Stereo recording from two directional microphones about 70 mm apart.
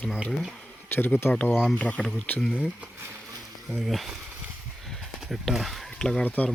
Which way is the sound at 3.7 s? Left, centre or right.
Centre.